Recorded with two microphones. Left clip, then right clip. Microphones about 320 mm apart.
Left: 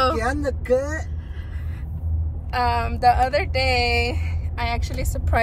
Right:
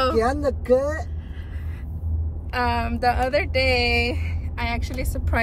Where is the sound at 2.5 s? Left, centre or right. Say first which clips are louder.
Left 2 dB; centre.